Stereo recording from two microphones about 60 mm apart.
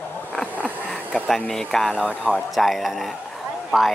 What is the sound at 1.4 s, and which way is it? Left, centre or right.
Speech, centre.